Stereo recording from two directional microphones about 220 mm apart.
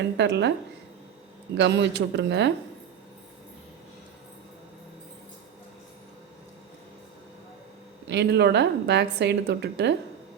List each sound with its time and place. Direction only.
0.2 s a woman's voice: 50° right (ahead or behind)
1.5 s a woman's voice: 55° right (ahead or behind)
8.0 s a woman's voice: 50° right (ahead or behind)